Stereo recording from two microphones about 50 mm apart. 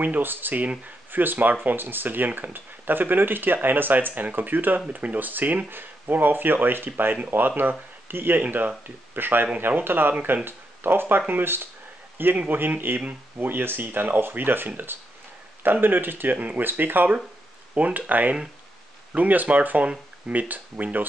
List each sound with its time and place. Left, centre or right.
0.0 s speech: right
8.4 s speech: right
17.7 s speech: right